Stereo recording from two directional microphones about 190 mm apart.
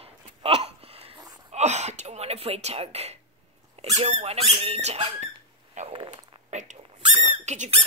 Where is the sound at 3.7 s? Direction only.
35° right (ahead or behind).